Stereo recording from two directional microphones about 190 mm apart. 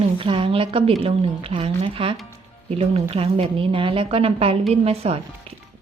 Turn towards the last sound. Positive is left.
turn(degrees=-30)  # may be behind; listen again after turning